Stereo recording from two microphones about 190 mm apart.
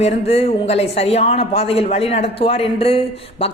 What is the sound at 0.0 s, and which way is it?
A man's voice, 35° left (ahead or behind).